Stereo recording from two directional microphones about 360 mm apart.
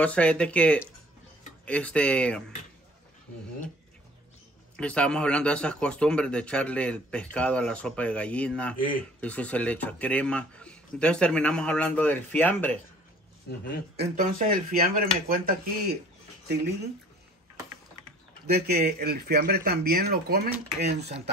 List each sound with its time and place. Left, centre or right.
0.0 s a man's voice: centre
4.7 s a man's voice: centre
13.9 s speech: centre
18.5 s speech: right